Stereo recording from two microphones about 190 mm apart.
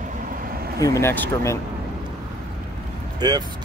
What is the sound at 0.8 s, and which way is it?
Speech, 15° left (ahead or behind).